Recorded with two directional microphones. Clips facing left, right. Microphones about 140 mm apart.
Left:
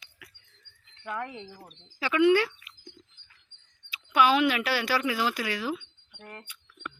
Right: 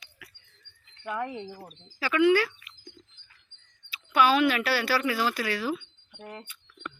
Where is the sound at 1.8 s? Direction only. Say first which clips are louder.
Even; 20° left (ahead or behind).